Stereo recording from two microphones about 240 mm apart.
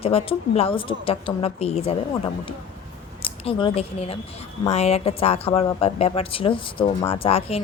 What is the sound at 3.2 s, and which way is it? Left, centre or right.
Speech, left.